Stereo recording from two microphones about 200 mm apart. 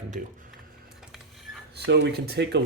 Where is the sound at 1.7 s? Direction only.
60° right (ahead or behind).